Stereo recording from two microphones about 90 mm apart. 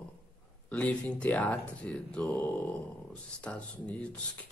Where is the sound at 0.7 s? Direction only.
15° left (ahead or behind).